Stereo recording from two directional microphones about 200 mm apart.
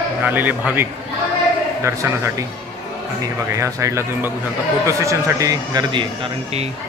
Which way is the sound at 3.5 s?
15° right (ahead or behind).